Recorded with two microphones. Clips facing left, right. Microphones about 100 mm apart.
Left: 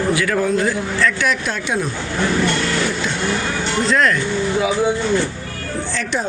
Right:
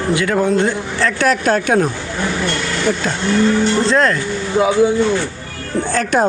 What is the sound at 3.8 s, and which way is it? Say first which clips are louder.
Speech: right 2 dB; 30° right (ahead or behind).